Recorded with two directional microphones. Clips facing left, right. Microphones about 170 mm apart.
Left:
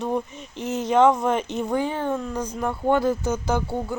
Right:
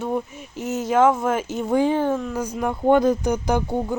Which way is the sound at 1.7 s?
15° right (ahead or behind).